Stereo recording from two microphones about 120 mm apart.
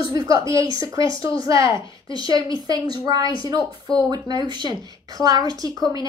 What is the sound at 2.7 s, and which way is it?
Speech, 35° right (ahead or behind).